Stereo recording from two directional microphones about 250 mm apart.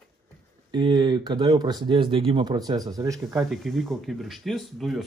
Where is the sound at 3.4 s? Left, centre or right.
Centre.